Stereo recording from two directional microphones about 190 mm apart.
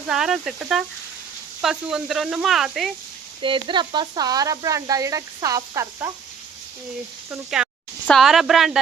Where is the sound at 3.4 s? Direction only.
25° right (ahead or behind).